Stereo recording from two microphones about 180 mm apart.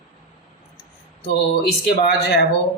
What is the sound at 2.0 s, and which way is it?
Speech, 65° left (ahead or behind).